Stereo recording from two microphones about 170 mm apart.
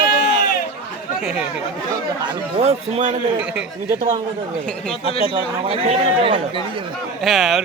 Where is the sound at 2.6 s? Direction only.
40° right (ahead or behind).